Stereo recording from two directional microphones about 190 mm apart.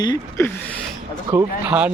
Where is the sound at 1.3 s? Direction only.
20° right (ahead or behind).